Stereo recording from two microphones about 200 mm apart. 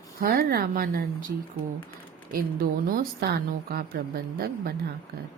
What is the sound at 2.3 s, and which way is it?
A woman's voice, 45° right (ahead or behind).